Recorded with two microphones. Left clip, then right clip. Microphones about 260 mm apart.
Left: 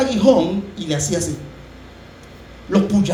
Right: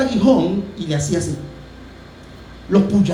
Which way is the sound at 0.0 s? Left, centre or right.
Left.